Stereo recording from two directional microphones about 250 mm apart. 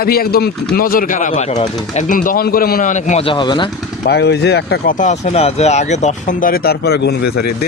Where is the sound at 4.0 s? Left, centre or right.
Left.